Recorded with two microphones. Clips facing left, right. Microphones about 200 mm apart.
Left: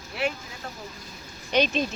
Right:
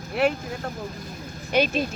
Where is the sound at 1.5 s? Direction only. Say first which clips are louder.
Right 1 dB; 10° right (ahead or behind).